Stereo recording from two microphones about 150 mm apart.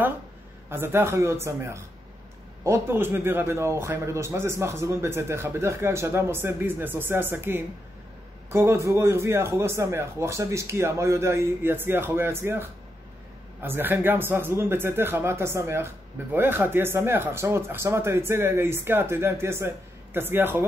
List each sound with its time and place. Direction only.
0.7 s speech: 15° right (ahead or behind)